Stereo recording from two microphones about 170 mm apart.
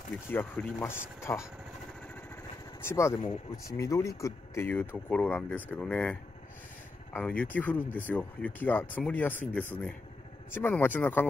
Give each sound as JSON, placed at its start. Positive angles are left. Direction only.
{"t": 0.3, "sound": "speech", "side_deg": 10}
{"t": 2.8, "sound": "speech", "side_deg": 15}